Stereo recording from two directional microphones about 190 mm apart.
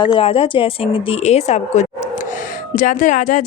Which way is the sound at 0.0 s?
30° left (ahead or behind).